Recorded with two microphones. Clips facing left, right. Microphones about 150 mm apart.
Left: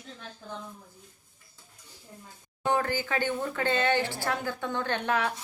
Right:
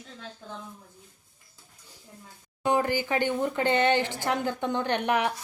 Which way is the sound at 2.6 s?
15° right (ahead or behind).